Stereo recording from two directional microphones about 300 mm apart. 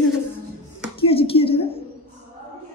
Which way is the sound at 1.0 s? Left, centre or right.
Centre.